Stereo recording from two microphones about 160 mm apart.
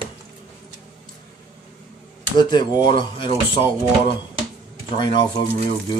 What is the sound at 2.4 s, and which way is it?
Speech, 25° left (ahead or behind).